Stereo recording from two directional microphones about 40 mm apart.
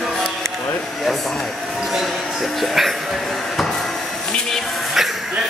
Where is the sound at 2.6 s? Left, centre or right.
Centre.